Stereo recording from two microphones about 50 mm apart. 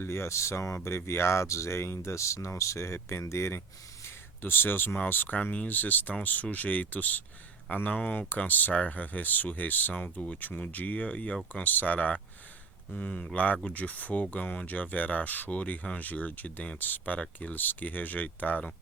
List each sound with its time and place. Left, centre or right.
0.0 s speech: left
4.0 s a sound: left
5.0 s speech: left